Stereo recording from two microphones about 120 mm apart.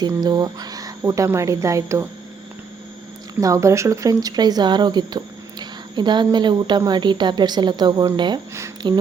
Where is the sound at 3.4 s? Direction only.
25° right (ahead or behind).